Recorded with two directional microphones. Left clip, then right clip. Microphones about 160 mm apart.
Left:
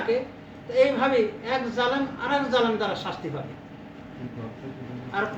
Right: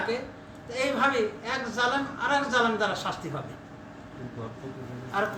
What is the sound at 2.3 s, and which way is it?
Speech, 10° right (ahead or behind).